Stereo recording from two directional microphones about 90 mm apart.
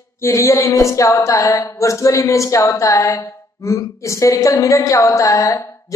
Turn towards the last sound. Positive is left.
turn(degrees=40)  # may be behind; listen again after turning